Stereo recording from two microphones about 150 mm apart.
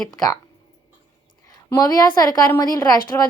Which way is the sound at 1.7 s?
25° left (ahead or behind).